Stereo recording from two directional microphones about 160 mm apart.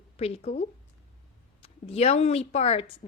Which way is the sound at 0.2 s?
40° left (ahead or behind).